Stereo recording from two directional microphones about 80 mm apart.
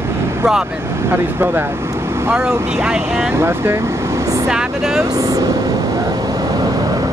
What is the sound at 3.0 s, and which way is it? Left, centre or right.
Speech, right.